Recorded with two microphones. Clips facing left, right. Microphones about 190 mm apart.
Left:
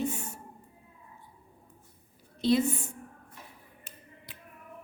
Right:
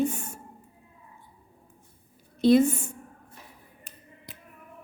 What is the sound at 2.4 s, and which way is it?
Speech, 50° right (ahead or behind).